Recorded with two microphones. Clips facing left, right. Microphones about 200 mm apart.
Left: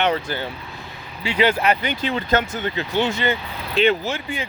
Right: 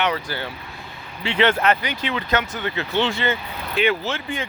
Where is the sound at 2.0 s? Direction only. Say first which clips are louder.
Left 2 dB; 30° left (ahead or behind).